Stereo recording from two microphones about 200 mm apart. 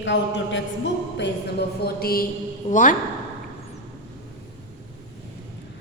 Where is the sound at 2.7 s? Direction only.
40° left (ahead or behind).